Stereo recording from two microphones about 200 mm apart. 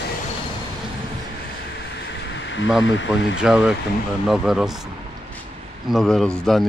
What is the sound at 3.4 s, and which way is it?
Speech, 5° right (ahead or behind).